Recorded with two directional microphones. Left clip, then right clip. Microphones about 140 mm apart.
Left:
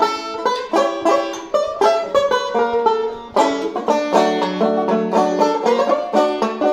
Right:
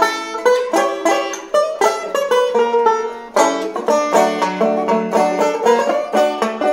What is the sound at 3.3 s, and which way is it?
Music, 25° left (ahead or behind).